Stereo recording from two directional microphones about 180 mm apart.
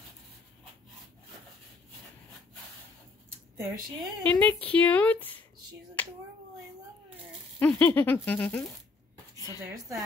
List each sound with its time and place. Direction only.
4.2 s speech: 10° left (ahead or behind)
6.0 s finger snapping: 10° left (ahead or behind)
7.5 s speech: 10° left (ahead or behind)
9.7 s a woman's voice: 15° right (ahead or behind)